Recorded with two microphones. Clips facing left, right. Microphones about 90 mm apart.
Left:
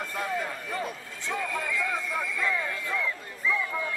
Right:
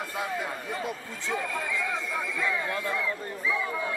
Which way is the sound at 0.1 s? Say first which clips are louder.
Left 1 dB; 5° right (ahead or behind).